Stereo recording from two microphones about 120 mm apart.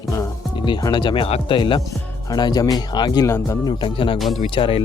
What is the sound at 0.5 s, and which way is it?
Speech, 40° left (ahead or behind).